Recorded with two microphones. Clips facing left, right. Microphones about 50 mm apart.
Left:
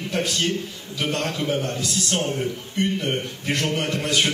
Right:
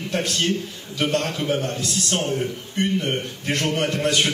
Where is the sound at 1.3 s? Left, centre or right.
Centre.